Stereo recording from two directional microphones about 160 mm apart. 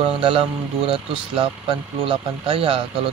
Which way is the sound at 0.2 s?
35° right (ahead or behind).